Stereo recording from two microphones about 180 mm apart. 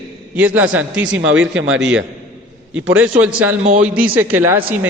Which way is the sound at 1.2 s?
90° right.